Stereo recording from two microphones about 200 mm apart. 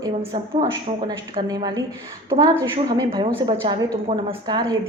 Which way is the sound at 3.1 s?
25° right (ahead or behind).